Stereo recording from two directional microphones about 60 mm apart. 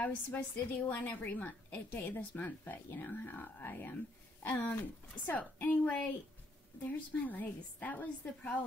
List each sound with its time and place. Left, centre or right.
0.0 s a woman's voice: left